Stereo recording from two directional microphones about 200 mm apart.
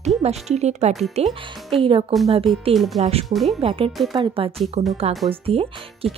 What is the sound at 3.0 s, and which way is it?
A woman's voice, 30° right (ahead or behind).